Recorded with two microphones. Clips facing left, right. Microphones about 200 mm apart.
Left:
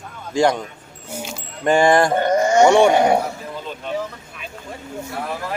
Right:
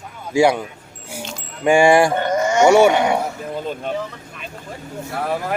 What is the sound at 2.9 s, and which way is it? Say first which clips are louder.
Speech: left 2 dB; 35° left (ahead or behind).